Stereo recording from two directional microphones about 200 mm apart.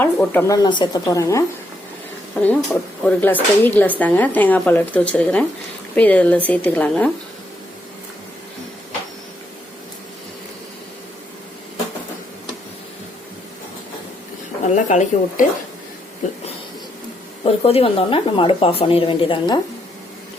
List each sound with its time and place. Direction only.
0.0 s speech: 10° left (ahead or behind)
14.8 s a woman's voice: 40° left (ahead or behind)
17.4 s a woman's voice: 30° left (ahead or behind)